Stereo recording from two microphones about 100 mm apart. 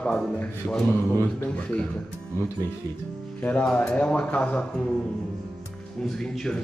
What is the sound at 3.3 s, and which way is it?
Music, 15° left (ahead or behind).